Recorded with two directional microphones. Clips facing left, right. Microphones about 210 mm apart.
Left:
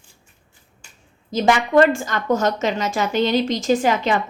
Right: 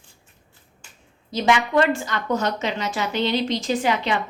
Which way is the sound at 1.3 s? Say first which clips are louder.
Left 4 dB; 45° left (ahead or behind).